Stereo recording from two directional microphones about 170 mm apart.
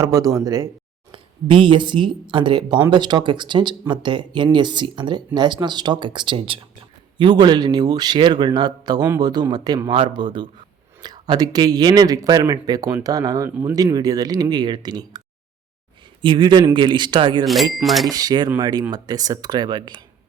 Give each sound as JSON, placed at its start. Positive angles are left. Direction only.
{"t": 0.0, "sound": "speech", "side_deg": -20}
{"t": 1.1, "sound": "speech", "side_deg": -30}
{"t": 16.2, "sound": "speech", "side_deg": -25}
{"t": 17.4, "sound": "speech", "side_deg": 0}
{"t": 18.1, "sound": "speech", "side_deg": -25}